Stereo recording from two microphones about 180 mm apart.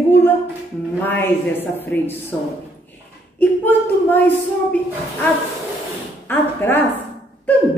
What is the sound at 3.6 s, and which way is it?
Speech, 10° left (ahead or behind).